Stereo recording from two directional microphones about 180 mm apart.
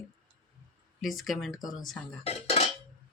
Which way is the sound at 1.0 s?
Centre (ahead or behind).